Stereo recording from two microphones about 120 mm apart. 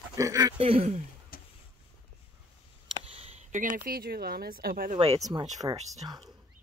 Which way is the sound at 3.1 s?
55° right (ahead or behind).